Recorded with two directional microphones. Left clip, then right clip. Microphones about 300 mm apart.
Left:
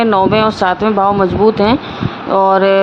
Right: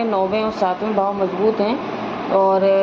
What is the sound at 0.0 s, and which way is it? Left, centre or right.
Speech, left.